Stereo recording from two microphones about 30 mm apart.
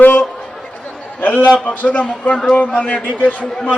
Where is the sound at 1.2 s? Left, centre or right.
Left.